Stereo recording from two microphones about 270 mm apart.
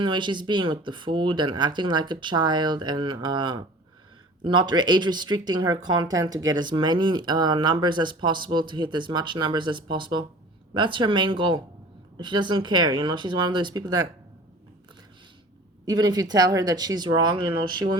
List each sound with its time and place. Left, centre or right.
0.0 s speech: centre
15.9 s speech: centre